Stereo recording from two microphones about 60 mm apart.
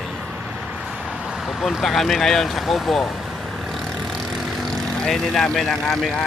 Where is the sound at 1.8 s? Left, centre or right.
Centre.